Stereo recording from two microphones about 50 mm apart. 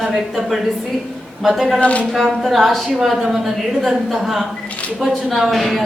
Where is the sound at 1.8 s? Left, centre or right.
Left.